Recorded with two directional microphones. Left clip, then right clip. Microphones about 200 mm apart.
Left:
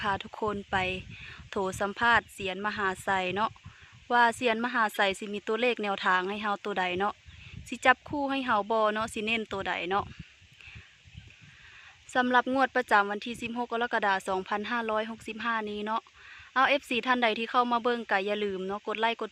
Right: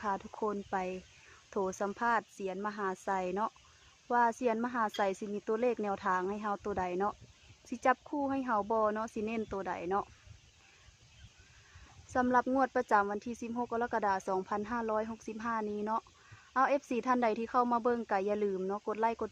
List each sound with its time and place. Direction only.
0.0 s speech: 10° left (ahead or behind)
12.3 s a woman's voice: 20° left (ahead or behind)